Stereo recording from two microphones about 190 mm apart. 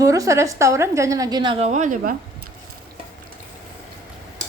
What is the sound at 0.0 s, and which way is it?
A woman's voice, 15° right (ahead or behind).